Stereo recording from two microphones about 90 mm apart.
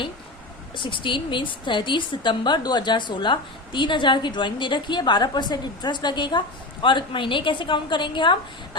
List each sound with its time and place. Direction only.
0.8 s a woman's voice: 65° left (ahead or behind)